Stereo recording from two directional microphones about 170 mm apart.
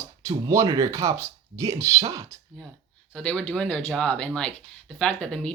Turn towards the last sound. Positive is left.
turn(degrees=5)  # may be behind; listen again after turning